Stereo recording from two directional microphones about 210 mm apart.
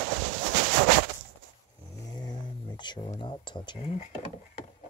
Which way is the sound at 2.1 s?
20° left (ahead or behind).